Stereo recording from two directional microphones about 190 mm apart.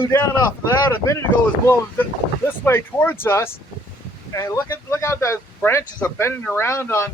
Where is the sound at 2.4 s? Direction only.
10° left (ahead or behind).